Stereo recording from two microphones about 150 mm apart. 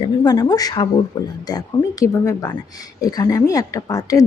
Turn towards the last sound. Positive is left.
turn(degrees=25)  # may be behind; listen again after turning